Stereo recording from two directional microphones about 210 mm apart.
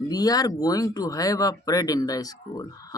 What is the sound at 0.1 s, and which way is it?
Speech, 15° left (ahead or behind).